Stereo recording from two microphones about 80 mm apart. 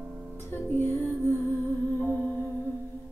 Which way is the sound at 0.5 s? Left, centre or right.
Left.